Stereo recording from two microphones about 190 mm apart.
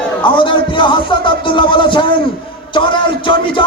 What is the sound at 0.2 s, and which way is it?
Music, 25° left (ahead or behind).